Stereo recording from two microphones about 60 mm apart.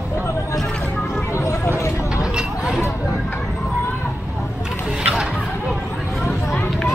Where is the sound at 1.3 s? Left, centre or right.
Left.